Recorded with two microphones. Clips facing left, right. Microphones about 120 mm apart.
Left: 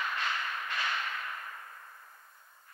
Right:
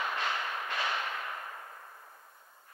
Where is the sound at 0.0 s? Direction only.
15° right (ahead or behind).